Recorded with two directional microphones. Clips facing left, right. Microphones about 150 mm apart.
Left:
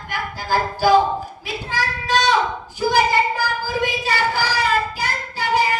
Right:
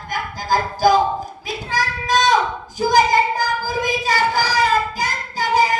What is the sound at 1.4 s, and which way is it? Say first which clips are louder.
Speech: right 2 dB; 40° right (ahead or behind).